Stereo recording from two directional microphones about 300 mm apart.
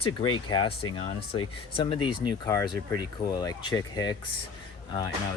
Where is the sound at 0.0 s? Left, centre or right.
Centre.